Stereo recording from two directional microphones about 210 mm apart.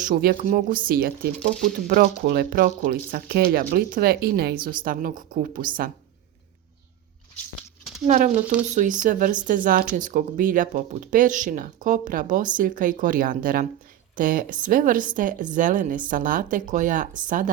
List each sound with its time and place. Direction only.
0.0 s speech: 40° right (ahead or behind)
8.0 s speech: 35° right (ahead or behind)